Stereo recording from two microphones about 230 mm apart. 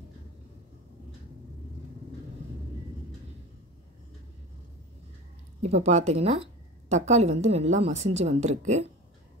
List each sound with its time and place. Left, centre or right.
5.6 s speech: right